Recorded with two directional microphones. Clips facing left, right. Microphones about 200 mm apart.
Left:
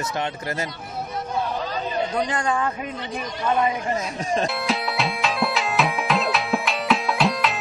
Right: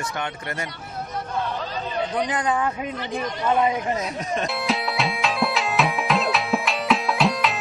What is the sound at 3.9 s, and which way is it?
Speech, 30° left (ahead or behind).